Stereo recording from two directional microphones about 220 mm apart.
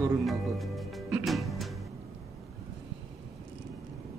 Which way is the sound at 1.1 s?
Centre (ahead or behind).